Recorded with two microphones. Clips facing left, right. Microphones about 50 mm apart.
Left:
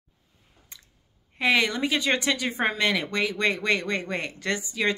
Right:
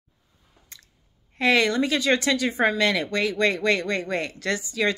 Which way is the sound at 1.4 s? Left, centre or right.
Centre.